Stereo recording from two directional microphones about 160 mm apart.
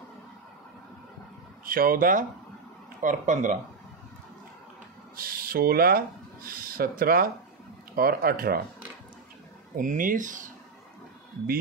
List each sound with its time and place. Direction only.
1.6 s speech: 65° right (ahead or behind)
5.1 s speech: 65° right (ahead or behind)
9.8 s speech: 55° right (ahead or behind)